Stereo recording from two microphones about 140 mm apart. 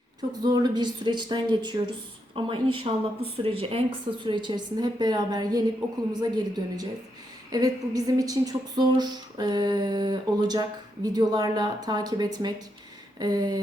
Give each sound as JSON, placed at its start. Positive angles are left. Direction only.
{"t": 0.4, "sound": "speech", "side_deg": -30}